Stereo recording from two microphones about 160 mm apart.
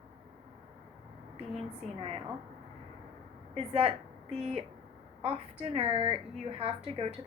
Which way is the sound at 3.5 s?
40° right (ahead or behind).